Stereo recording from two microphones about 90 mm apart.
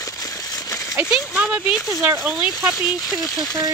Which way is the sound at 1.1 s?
15° right (ahead or behind).